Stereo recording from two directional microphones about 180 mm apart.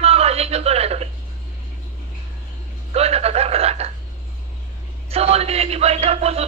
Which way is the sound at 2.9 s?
35° right (ahead or behind).